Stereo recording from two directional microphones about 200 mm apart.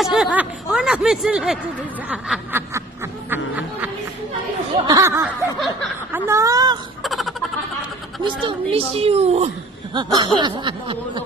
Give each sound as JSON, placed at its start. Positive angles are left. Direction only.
{"t": 0.0, "sound": "speech", "side_deg": 0}
{"t": 3.3, "sound": "snicker", "side_deg": -10}
{"t": 4.8, "sound": "a sound", "side_deg": -15}
{"t": 7.0, "sound": "a sound", "side_deg": 0}
{"t": 8.2, "sound": "speech", "side_deg": -25}
{"t": 9.9, "sound": "speech", "side_deg": -20}